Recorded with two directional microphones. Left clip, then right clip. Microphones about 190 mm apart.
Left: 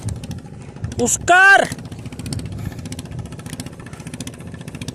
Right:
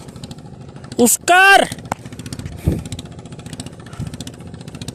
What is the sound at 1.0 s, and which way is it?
Speech, 70° right (ahead or behind).